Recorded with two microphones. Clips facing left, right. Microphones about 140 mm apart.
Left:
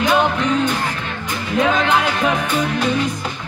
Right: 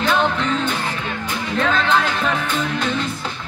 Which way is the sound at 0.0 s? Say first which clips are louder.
Left 2 dB; 10° left (ahead or behind).